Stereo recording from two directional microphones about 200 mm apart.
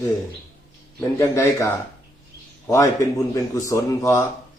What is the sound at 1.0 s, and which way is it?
A man's voice, 15° left (ahead or behind).